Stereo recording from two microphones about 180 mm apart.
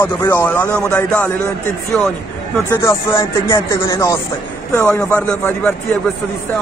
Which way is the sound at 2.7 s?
15° left (ahead or behind).